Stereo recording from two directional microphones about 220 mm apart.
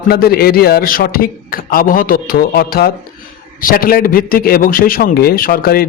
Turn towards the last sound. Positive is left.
turn(degrees=40)  # may be behind; listen again after turning